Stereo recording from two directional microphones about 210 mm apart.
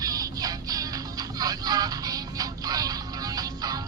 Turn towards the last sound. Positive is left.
turn(degrees=-20)  # may be behind; listen again after turning